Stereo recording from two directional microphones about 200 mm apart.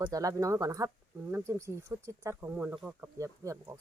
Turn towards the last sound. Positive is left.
turn(degrees=-15)  # may be behind; listen again after turning